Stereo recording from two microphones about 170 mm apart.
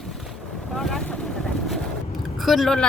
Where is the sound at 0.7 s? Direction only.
Centre (ahead or behind).